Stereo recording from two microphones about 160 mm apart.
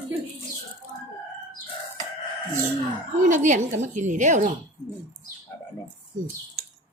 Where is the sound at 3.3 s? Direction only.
50° right (ahead or behind).